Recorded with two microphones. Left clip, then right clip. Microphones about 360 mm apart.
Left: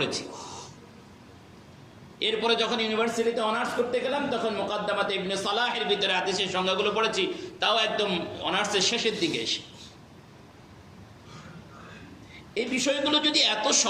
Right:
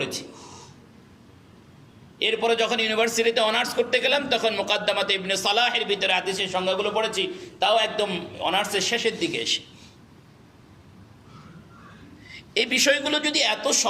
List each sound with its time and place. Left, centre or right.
0.0 s a man's voice: right
2.1 s a man's voice: right
12.3 s a man's voice: right